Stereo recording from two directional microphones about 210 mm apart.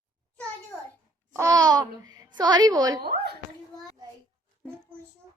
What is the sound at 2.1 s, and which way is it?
Speech, 20° right (ahead or behind).